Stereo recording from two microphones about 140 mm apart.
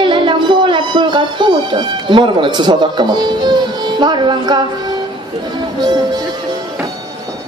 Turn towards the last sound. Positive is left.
turn(degrees=-30)  # may be behind; listen again after turning